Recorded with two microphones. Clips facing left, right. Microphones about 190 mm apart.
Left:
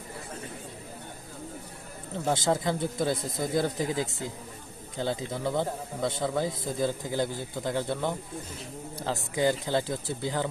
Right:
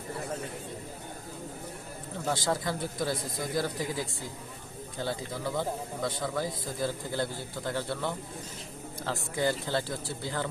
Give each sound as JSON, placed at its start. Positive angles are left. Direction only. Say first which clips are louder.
{"t": 2.3, "sound": "a man's voice", "louder": "left 4 dB", "side_deg": 20}